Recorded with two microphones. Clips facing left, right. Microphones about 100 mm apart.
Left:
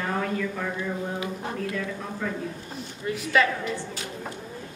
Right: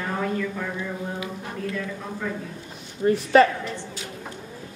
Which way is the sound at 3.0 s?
40° right (ahead or behind).